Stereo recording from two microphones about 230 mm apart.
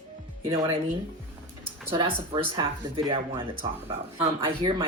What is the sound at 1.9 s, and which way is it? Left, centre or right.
Speech, right.